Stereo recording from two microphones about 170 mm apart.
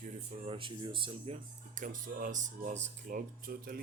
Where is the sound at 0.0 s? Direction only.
35° right (ahead or behind).